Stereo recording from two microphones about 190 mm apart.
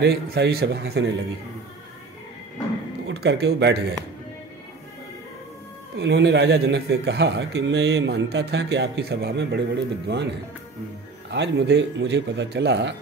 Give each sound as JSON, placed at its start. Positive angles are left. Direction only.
{"t": 0.0, "sound": "a man's voice", "side_deg": -60}
{"t": 3.1, "sound": "speech", "side_deg": -65}
{"t": 5.9, "sound": "a man's voice", "side_deg": -65}